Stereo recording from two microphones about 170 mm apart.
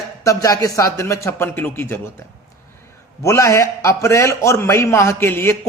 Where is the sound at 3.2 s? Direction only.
15° left (ahead or behind).